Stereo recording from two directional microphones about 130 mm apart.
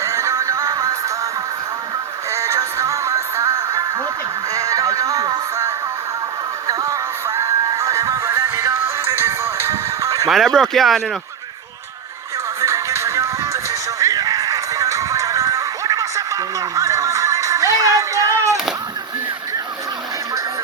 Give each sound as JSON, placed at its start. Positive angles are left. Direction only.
{"t": 0.0, "sound": "music", "side_deg": -25}
{"t": 2.3, "sound": "music", "side_deg": -25}
{"t": 10.2, "sound": "speech", "side_deg": 0}
{"t": 12.6, "sound": "music", "side_deg": -20}